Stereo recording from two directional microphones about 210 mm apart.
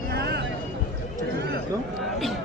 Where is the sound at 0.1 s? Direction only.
50° right (ahead or behind).